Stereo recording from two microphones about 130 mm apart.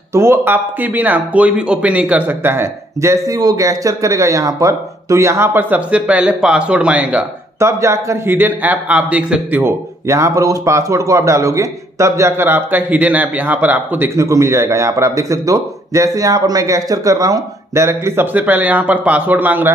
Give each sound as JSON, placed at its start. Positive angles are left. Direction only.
{"t": 0.1, "sound": "speech", "side_deg": -20}
{"t": 7.5, "sound": "a man's voice", "side_deg": -20}